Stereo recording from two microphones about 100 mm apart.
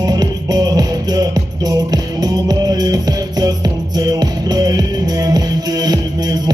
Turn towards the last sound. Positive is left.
turn(degrees=-40)  # may be behind; listen again after turning